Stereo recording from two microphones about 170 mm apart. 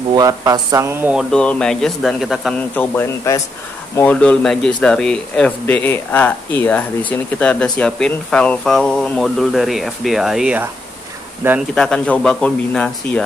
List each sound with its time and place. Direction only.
0.1 s speech: 20° right (ahead or behind)
1.1 s speech: 5° left (ahead or behind)
2.7 s speech: 10° left (ahead or behind); by 10.7 s 5° right (ahead or behind)
11.7 s speech: 5° left (ahead or behind)